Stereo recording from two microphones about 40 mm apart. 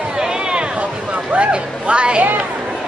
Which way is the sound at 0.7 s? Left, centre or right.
Right.